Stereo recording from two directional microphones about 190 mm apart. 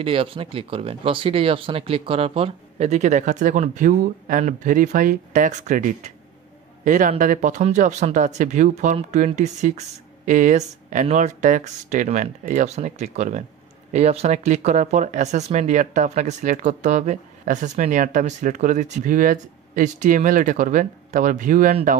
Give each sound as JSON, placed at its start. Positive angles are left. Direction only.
{"t": 0.0, "sound": "speech", "side_deg": -30}